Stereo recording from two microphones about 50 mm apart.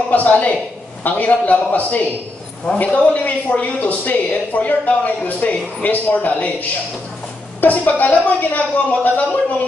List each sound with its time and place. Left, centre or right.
0.1 s a man's voice: left
7.6 s a man's voice: left